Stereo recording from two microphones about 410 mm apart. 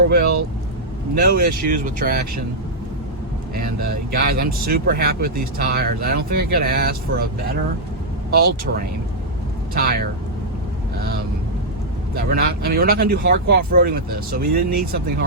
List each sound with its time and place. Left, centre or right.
1.1 s speech: right
3.5 s speech: right
8.3 s speech: right